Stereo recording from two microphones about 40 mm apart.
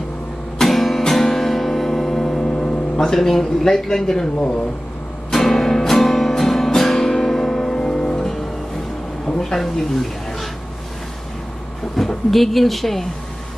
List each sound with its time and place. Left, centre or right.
0.6 s music: centre
3.2 s speech: centre
5.3 s music: centre
9.4 s speech: centre
12.0 s a sound: centre
12.3 s speech: centre